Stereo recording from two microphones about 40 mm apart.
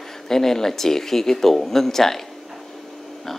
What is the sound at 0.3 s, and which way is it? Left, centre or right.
Speech, centre.